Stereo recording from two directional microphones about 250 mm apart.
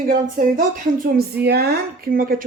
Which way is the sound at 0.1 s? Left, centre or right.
Right.